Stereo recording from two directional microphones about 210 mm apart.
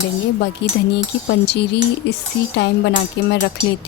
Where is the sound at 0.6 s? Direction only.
55° left (ahead or behind).